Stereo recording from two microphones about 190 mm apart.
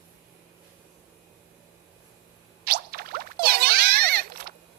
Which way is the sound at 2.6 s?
55° right (ahead or behind).